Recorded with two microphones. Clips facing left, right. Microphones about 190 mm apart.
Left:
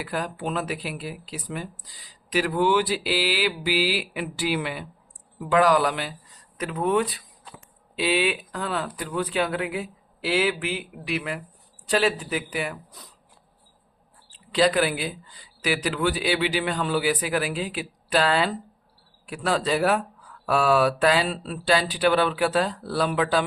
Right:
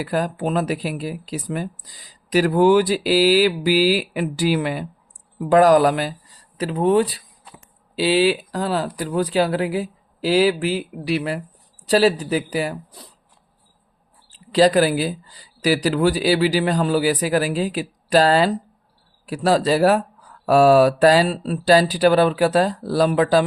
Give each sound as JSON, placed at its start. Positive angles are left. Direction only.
{"t": 0.0, "sound": "speech", "side_deg": -40}
{"t": 14.3, "sound": "speech", "side_deg": -35}